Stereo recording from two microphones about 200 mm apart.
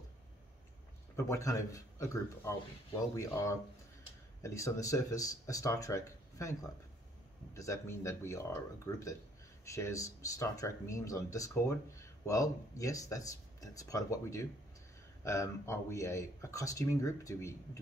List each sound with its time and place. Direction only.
1.1 s speech: 15° left (ahead or behind)